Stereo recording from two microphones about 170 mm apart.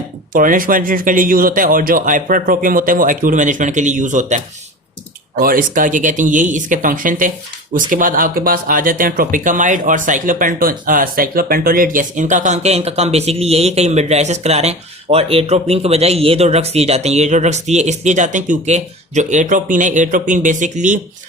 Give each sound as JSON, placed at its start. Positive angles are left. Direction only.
{"t": 0.3, "sound": "speech", "side_deg": -55}
{"t": 5.4, "sound": "speech", "side_deg": -55}